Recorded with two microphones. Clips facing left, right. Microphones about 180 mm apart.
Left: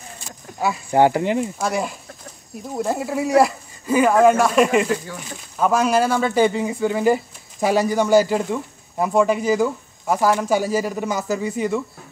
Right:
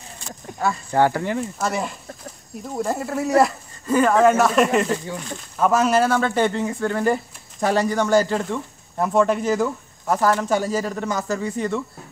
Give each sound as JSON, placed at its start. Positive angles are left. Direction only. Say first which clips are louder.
{"t": 0.6, "sound": "speech", "louder": "left 2 dB", "side_deg": 10}
{"t": 1.6, "sound": "speech", "louder": "left 2 dB", "side_deg": 0}